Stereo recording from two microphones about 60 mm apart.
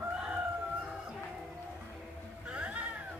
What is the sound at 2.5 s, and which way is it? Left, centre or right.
Music, centre.